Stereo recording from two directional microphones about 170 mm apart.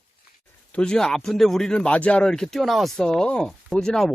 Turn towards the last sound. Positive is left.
turn(degrees=0)  # may be behind; listen again after turning